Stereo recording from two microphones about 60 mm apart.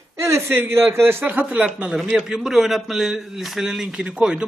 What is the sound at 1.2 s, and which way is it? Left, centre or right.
Speech, right.